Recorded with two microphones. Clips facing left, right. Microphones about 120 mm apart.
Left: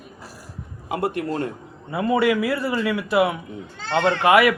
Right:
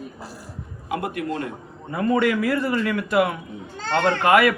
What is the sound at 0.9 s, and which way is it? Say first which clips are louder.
Speech: left 2 dB; 30° left (ahead or behind).